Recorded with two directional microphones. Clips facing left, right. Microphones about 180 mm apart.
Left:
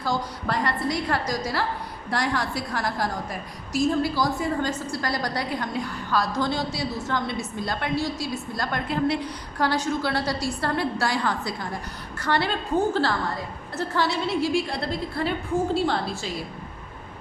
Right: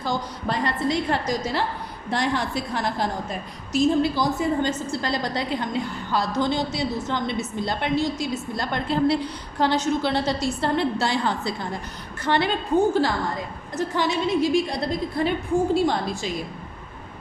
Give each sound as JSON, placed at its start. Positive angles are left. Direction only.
{"t": 0.0, "sound": "a woman's voice", "side_deg": -20}